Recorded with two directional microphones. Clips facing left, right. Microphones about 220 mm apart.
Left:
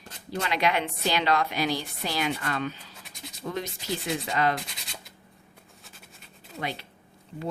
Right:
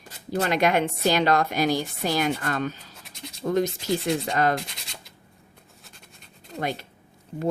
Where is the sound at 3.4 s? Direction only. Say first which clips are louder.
Right 9 dB; 45° right (ahead or behind).